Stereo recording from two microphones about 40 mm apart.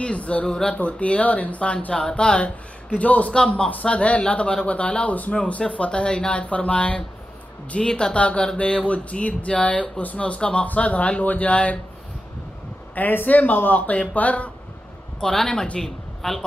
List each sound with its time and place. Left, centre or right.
0.0 s a man's voice: left
1.9 s speech: left
2.9 s speech: left
3.3 s speech: left
5.6 s speech: left
7.8 s speech: left
13.1 s a man's voice: left
15.3 s speech: centre
15.8 s speech: centre